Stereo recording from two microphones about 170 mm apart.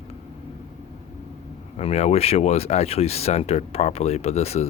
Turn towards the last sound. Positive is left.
turn(degrees=40)  # may be behind; listen again after turning